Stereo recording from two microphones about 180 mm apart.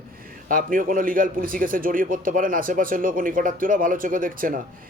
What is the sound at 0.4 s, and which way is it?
Speech, 50° right (ahead or behind).